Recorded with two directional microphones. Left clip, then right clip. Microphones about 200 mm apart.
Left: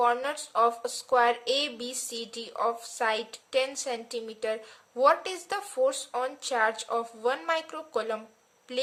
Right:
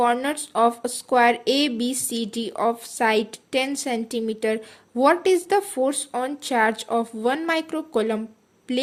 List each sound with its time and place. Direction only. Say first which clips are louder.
0.0 s a woman's voice: right 5 dB; 30° right (ahead or behind)